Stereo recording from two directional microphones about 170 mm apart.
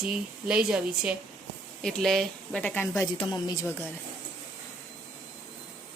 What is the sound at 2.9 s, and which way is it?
Speech, 25° left (ahead or behind).